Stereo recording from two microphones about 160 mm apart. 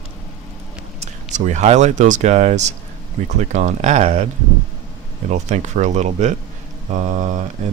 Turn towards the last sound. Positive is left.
turn(degrees=-55)  # may be behind; listen again after turning